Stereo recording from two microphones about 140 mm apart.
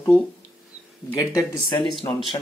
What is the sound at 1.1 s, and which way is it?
Speech, 35° left (ahead or behind).